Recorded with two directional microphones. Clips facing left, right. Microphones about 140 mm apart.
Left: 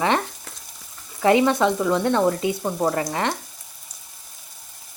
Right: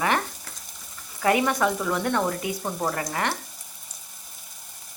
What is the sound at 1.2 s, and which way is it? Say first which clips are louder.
Speech: left 5 dB; 20° left (ahead or behind).